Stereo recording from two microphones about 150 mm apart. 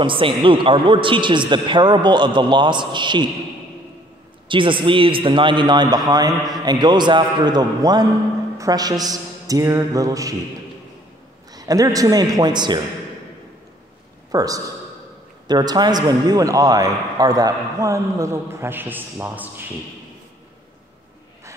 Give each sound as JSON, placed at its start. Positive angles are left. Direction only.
{"t": 0.0, "sound": "a man's voice", "side_deg": -35}
{"t": 4.5, "sound": "a man's voice", "side_deg": -35}
{"t": 11.5, "sound": "a man's voice", "side_deg": -25}
{"t": 14.3, "sound": "a man's voice", "side_deg": -25}